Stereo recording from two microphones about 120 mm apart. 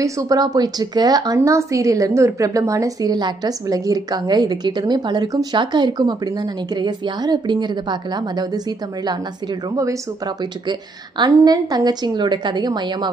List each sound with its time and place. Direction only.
0.0 s a woman's voice: 30° right (ahead or behind)